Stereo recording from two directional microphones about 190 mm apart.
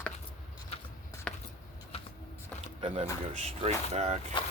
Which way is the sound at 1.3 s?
5° left (ahead or behind).